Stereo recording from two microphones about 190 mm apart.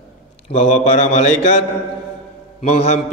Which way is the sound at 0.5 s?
35° left (ahead or behind).